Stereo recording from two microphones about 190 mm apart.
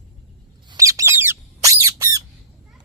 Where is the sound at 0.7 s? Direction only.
15° right (ahead or behind).